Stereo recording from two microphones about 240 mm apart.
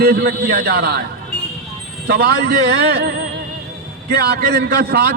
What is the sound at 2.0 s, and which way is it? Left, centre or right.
A man's voice, right.